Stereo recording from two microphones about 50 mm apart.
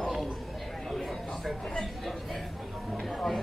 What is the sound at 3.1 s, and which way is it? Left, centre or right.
Chatter, centre.